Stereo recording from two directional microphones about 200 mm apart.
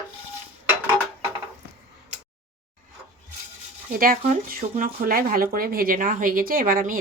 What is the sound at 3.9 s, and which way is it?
Speech, 45° right (ahead or behind).